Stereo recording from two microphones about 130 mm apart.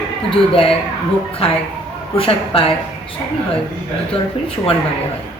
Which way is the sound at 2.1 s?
45° left (ahead or behind).